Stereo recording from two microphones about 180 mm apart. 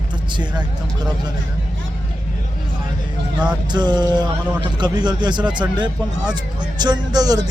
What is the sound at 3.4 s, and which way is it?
A man's voice, 25° right (ahead or behind).